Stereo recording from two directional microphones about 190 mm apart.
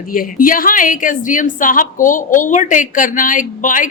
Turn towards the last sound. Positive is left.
turn(degrees=45)  # may be behind; listen again after turning